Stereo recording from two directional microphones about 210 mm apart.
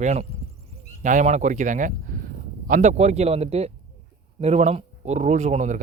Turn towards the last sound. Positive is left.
turn(degrees=-35)  # may be behind; listen again after turning